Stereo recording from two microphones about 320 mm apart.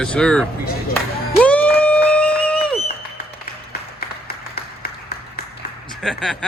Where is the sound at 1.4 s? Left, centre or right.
Centre.